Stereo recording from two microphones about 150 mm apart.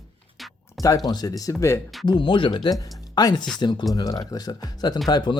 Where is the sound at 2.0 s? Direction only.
30° left (ahead or behind).